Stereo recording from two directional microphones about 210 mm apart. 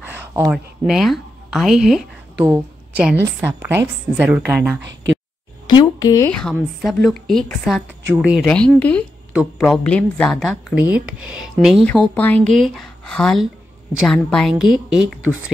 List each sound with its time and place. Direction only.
0.0 s a woman's voice: 10° right (ahead or behind)
5.7 s speech: 20° left (ahead or behind)
6.3 s speech: centre (ahead or behind)